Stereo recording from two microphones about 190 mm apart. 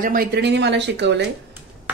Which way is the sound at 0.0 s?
50° right (ahead or behind).